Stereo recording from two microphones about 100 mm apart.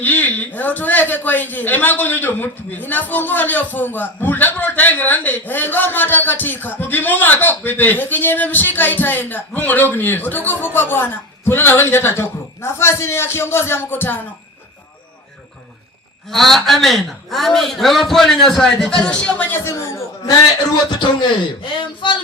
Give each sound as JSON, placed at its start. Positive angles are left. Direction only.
{"t": 0.0, "sound": "a man's voice", "side_deg": 15}
{"t": 16.3, "sound": "a man's voice", "side_deg": 0}
{"t": 21.2, "sound": "speech", "side_deg": 55}